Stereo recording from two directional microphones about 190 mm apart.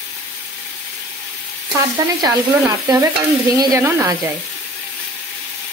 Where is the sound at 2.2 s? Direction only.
20° right (ahead or behind).